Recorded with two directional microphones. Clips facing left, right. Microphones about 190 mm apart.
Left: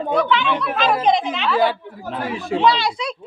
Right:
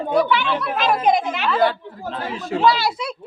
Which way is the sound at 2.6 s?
5° right (ahead or behind).